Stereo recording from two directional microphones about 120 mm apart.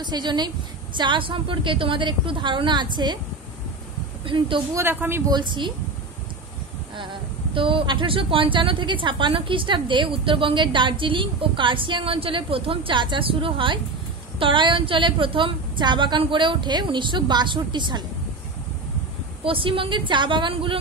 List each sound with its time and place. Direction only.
0.0 s a woman's voice: 40° right (ahead or behind)
4.2 s a woman's voice: 45° right (ahead or behind)
4.7 s speech: 20° right (ahead or behind)
5.3 s a woman's voice: 40° right (ahead or behind)
7.0 s a woman's voice: 45° right (ahead or behind)
19.4 s a woman's voice: 45° right (ahead or behind)